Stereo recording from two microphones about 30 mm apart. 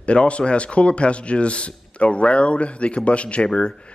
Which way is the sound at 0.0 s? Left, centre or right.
Left.